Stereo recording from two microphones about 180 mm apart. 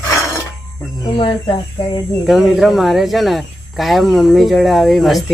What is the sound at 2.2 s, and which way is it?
Speech, centre (ahead or behind).